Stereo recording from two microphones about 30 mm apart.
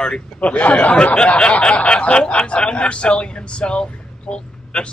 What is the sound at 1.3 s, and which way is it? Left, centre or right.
Speech, left.